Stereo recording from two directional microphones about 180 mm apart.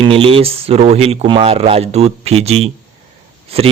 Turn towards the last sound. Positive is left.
turn(degrees=-30)  # may be behind; listen again after turning